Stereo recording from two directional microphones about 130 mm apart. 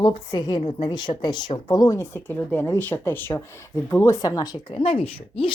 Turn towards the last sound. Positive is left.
turn(degrees=45)  # may be behind; listen again after turning